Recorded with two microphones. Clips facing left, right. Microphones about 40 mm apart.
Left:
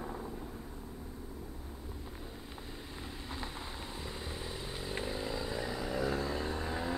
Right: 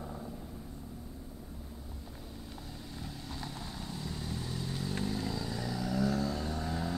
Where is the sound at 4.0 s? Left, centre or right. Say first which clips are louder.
Right 4 dB; left.